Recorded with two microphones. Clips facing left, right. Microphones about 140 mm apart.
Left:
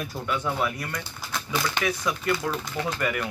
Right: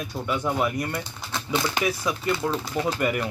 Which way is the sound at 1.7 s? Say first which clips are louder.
Right 1 dB; 5° right (ahead or behind).